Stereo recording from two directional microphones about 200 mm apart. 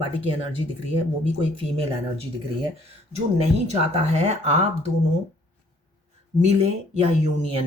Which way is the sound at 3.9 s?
35° right (ahead or behind).